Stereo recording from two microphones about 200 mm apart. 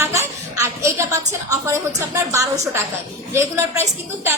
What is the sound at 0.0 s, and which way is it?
A woman's voice, 15° right (ahead or behind).